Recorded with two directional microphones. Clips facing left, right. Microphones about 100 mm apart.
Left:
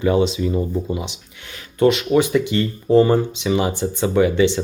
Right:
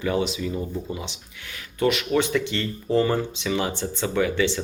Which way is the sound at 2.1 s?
10° left (ahead or behind).